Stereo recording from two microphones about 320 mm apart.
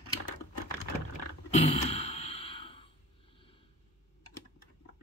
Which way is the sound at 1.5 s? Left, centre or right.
Left.